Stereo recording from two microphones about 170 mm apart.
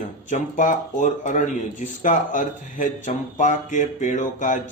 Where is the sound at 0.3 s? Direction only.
50° left (ahead or behind).